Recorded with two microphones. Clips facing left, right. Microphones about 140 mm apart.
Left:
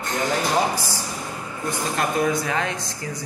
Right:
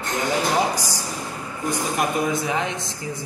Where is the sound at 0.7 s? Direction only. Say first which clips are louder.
Even; 15° right (ahead or behind).